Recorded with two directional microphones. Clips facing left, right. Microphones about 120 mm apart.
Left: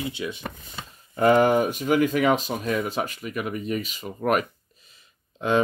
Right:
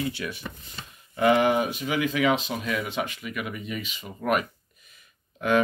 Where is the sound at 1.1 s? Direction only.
40° left (ahead or behind).